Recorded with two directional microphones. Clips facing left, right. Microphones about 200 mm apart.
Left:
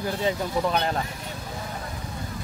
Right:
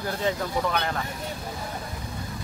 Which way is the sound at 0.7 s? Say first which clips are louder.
Left 3 dB; 30° left (ahead or behind).